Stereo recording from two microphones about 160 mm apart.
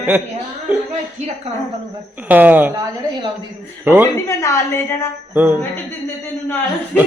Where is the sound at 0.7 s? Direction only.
5° right (ahead or behind).